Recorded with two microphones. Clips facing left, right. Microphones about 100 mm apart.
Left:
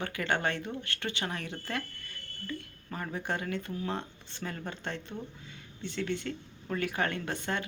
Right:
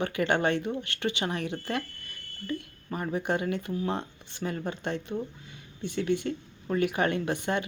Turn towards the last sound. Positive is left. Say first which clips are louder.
# right 5 dB
turn(degrees=-15)  # may be behind; listen again after turning